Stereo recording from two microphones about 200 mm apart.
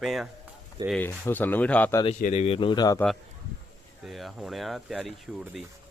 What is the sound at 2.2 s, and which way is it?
Speech, 35° left (ahead or behind).